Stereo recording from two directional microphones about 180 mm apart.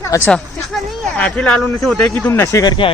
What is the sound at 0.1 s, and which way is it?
Speech, 20° left (ahead or behind).